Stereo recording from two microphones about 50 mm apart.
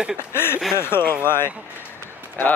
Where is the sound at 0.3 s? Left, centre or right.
Left.